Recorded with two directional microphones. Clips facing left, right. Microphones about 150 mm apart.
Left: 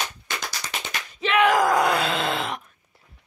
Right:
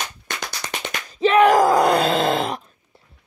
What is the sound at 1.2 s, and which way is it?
Speech, 40° right (ahead or behind).